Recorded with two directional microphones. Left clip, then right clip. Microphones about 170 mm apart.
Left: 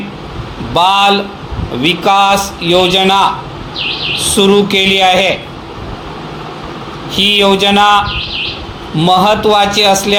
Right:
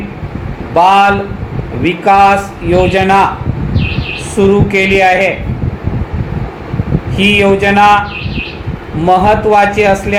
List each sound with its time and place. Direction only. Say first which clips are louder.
0.7 s a man's voice: right 2 dB; 45° left (ahead or behind)
4.4 s a man's voice: even; 45° left (ahead or behind)
7.2 s a man's voice: even; 45° left (ahead or behind)
9.0 s a man's voice: right 1 dB; 45° left (ahead or behind)